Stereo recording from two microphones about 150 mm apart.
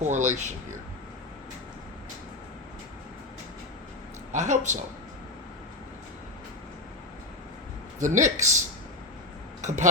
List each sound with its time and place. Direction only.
0.0 s speech: 55° right (ahead or behind)
4.3 s speech: 55° right (ahead or behind)
7.9 s speech: 55° right (ahead or behind)
9.6 s a sound: 55° right (ahead or behind)